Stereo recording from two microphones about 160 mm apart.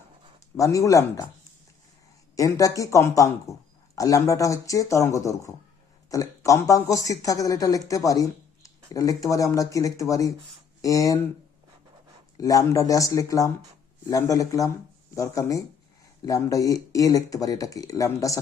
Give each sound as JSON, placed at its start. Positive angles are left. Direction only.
{"t": 0.5, "sound": "speech", "side_deg": 20}
{"t": 2.3, "sound": "speech", "side_deg": 20}
{"t": 12.4, "sound": "speech", "side_deg": 20}